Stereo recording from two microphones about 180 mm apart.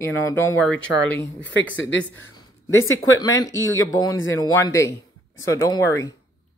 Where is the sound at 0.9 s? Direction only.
75° left (ahead or behind).